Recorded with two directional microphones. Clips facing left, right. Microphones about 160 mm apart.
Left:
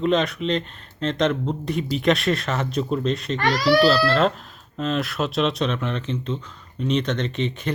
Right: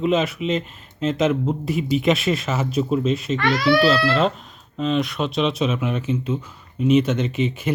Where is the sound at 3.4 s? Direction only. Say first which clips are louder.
Even; 40° left (ahead or behind).